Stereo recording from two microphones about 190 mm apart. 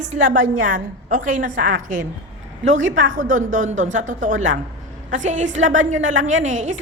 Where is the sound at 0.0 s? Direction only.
40° right (ahead or behind).